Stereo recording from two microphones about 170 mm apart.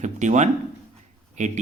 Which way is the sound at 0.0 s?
45° right (ahead or behind).